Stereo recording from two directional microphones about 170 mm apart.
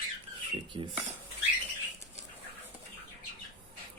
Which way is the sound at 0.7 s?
30° right (ahead or behind).